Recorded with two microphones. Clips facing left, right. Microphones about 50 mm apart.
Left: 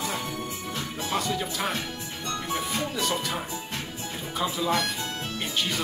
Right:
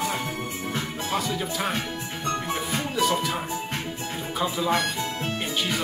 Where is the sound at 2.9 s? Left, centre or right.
Centre.